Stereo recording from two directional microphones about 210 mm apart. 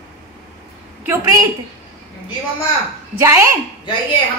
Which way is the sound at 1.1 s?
15° right (ahead or behind).